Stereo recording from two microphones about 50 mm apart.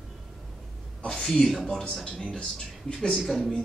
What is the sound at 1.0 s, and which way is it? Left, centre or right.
Speech, centre.